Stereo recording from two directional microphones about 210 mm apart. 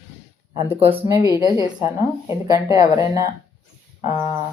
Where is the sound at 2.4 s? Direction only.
15° right (ahead or behind).